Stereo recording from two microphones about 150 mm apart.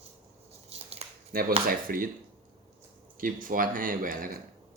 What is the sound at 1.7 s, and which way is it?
Speech, 70° right (ahead or behind).